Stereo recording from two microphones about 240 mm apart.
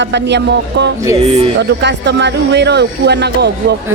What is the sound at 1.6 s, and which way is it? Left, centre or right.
Speech, right.